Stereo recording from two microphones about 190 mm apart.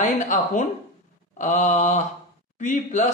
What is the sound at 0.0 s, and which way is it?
A man's voice, 40° left (ahead or behind).